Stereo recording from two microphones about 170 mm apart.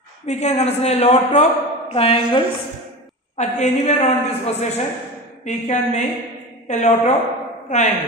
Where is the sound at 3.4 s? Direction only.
45° left (ahead or behind).